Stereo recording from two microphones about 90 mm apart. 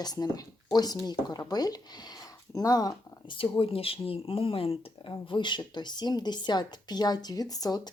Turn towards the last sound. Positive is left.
turn(degrees=45)  # may be behind; listen again after turning